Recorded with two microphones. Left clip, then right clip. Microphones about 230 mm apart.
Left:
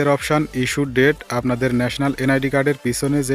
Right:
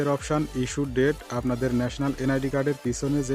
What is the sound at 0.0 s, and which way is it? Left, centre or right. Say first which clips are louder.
Speech: left 8 dB; left.